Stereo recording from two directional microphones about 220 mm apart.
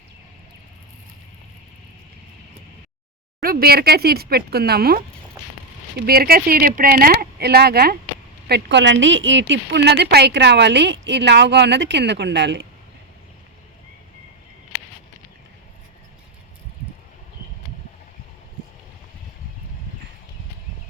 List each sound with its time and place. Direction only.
3.4 s a woman's voice: 45° right (ahead or behind)
6.1 s a woman's voice: 45° right (ahead or behind)